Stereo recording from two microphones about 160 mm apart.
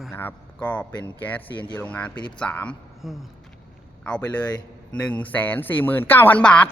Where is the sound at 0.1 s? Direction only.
10° left (ahead or behind).